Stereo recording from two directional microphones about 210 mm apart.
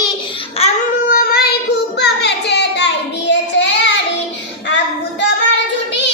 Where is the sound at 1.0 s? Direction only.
45° left (ahead or behind).